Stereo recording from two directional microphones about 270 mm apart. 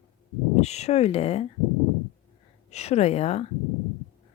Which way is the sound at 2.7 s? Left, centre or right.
Left.